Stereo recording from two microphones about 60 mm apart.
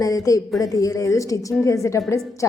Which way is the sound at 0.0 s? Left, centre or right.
Left.